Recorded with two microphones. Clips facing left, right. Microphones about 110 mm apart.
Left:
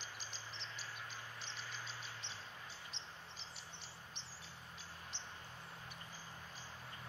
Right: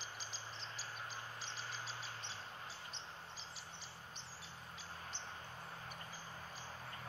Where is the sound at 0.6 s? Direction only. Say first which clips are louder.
Right 1 dB; 35° right (ahead or behind).